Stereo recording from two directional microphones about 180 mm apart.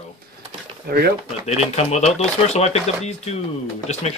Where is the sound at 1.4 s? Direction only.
40° left (ahead or behind).